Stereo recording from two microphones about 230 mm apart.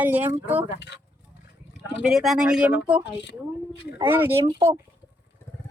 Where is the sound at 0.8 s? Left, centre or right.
Left.